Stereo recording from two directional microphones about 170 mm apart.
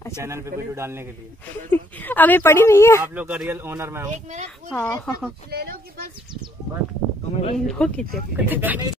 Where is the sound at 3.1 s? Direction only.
10° right (ahead or behind).